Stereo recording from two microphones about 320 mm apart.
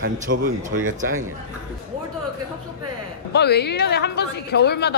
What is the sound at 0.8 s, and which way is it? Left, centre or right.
Speech, right.